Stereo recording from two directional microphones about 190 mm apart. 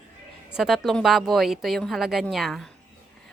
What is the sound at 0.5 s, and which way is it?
A woman's voice, centre (ahead or behind).